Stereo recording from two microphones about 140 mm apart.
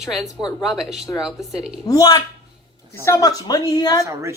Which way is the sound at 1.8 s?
25° left (ahead or behind).